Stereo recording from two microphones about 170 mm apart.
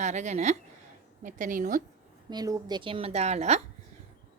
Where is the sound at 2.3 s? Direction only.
25° right (ahead or behind).